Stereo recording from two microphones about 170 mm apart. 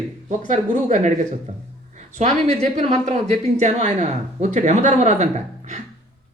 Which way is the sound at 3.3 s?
45° right (ahead or behind).